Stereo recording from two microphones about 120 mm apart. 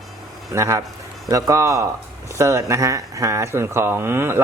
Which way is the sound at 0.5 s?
25° right (ahead or behind).